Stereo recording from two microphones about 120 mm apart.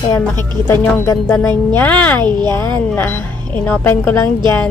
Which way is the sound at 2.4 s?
35° right (ahead or behind).